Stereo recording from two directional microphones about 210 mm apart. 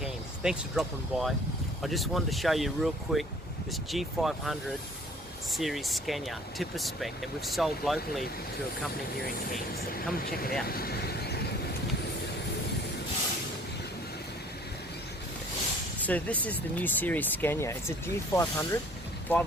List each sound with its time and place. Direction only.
0.0 s speech: centre (ahead or behind)
9.2 s speech: 45° left (ahead or behind)
10.7 s vehicle: 45° left (ahead or behind)
16.0 s speech: 5° left (ahead or behind)